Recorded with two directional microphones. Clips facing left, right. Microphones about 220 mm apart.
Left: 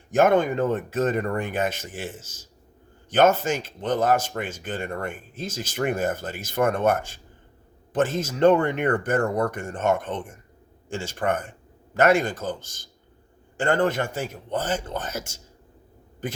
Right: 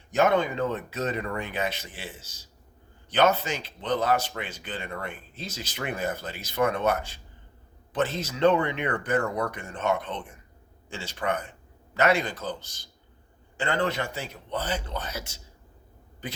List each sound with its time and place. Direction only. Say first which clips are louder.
0.1 s speech: left 4 dB; 50° left (ahead or behind)